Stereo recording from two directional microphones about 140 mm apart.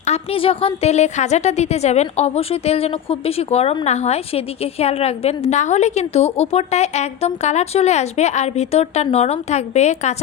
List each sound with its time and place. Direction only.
0.0 s a woman's voice: 45° left (ahead or behind)